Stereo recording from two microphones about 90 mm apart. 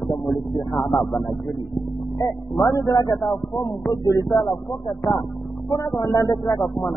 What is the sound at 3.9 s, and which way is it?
Speech, 40° left (ahead or behind).